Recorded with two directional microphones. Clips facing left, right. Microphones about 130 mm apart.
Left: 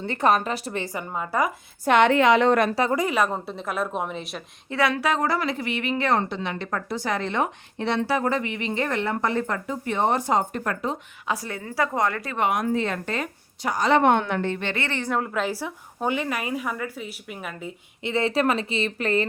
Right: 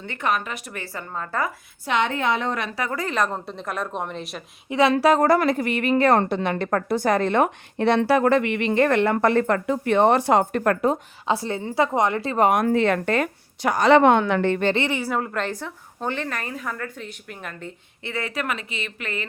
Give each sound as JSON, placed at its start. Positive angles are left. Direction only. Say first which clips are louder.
{"t": 0.0, "sound": "speech", "louder": "left 4 dB", "side_deg": 35}
{"t": 1.1, "sound": "a woman's voice", "louder": "left 2 dB", "side_deg": 10}
{"t": 1.8, "sound": "a woman's voice", "louder": "left 5 dB", "side_deg": 60}
{"t": 2.9, "sound": "a woman's voice", "louder": "left 2 dB", "side_deg": 10}
{"t": 4.7, "sound": "a woman's voice", "louder": "right 5 dB", "side_deg": -25}
{"t": 4.9, "sound": "a woman's voice", "louder": "right 7 dB", "side_deg": -40}
{"t": 11.3, "sound": "a woman's voice", "louder": "right 5 dB", "side_deg": -25}
{"t": 12.4, "sound": "a woman's voice", "louder": "right 5 dB", "side_deg": -50}
{"t": 14.8, "sound": "a woman's voice", "louder": "right 2 dB", "side_deg": -10}
{"t": 18.0, "sound": "speech", "louder": "left 6 dB", "side_deg": 25}